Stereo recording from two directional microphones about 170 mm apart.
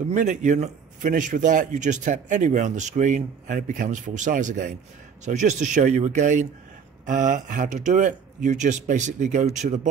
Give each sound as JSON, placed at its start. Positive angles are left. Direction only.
{"t": 0.1, "sound": "a man's voice", "side_deg": -45}